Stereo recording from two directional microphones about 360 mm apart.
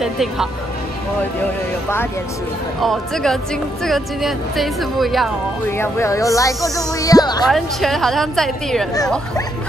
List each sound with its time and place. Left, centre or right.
0.0 s a woman's voice: centre
2.8 s a woman's voice: centre
7.4 s a woman's voice: centre